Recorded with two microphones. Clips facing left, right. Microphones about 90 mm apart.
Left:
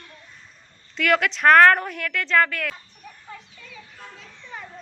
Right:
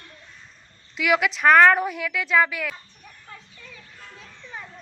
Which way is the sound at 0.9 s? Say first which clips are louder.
Left 1 dB; 5° right (ahead or behind).